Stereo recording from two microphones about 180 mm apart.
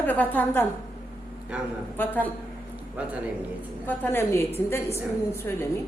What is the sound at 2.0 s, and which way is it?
Speech, 10° left (ahead or behind).